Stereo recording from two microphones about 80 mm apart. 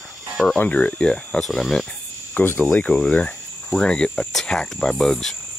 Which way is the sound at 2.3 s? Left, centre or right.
Left.